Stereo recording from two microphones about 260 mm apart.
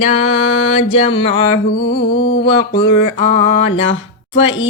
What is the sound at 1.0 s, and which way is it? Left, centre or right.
Music, left.